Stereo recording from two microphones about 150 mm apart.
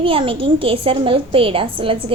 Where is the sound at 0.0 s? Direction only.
35° right (ahead or behind).